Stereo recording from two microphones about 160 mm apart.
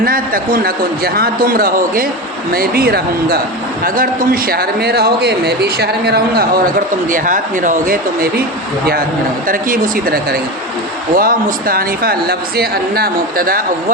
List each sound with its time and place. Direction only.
0.0 s speech: 65° right (ahead or behind)
3.8 s a man's voice: 60° right (ahead or behind); by 6.4 s 80° right
7.1 s speech: 55° right (ahead or behind)
9.5 s speech: 60° right (ahead or behind)